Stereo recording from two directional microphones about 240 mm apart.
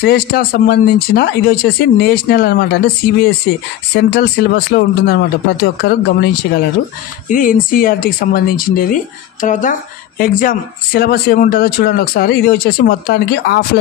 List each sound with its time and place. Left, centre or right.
0.0 s speech: left